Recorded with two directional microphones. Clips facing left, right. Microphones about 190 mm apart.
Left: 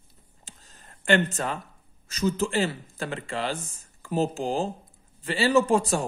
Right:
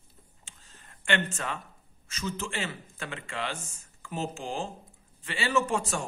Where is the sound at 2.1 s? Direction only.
35° left (ahead or behind).